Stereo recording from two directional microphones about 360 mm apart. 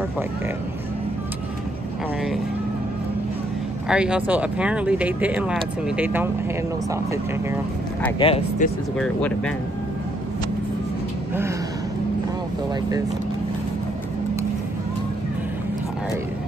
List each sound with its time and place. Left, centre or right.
3.9 s speech: centre
8.0 s speech: centre
8.9 s speech: centre